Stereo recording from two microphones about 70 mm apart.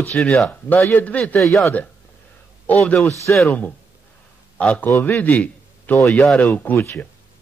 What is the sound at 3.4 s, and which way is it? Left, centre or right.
Speech, centre.